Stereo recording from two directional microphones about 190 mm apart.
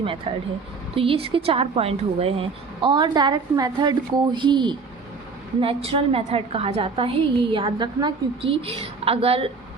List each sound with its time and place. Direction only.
0.0 s a woman's voice: 25° right (ahead or behind)